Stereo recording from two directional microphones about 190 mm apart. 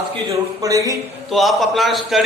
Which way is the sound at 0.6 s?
15° right (ahead or behind).